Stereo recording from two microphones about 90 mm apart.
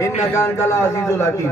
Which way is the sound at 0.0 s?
35° left (ahead or behind).